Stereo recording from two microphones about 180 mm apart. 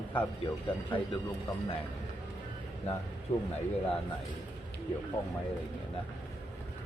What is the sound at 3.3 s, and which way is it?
Speech, 35° left (ahead or behind).